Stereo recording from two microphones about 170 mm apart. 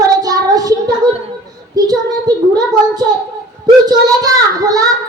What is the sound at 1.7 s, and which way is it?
Child singing, 20° right (ahead or behind).